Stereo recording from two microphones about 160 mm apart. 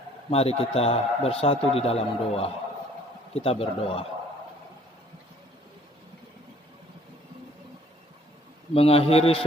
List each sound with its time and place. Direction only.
0.3 s a man's voice: 40° left (ahead or behind)
8.7 s a man's voice: 35° left (ahead or behind)